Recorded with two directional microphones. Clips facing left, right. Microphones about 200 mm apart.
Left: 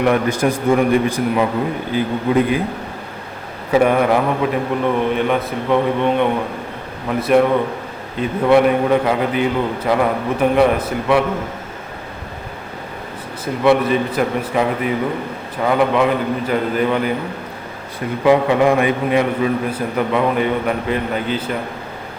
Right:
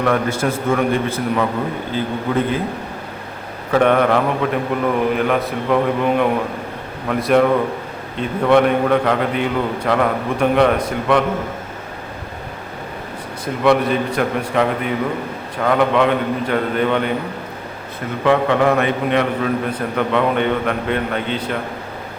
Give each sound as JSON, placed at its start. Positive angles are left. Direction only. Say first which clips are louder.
{"t": 0.0, "sound": "a man's voice", "louder": "left 2 dB", "side_deg": 15}
{"t": 3.7, "sound": "a man's voice", "louder": "even", "side_deg": 5}
{"t": 13.4, "sound": "a man's voice", "louder": "left 1 dB", "side_deg": 0}
{"t": 18.3, "sound": "a man's voice", "louder": "left 2 dB", "side_deg": 15}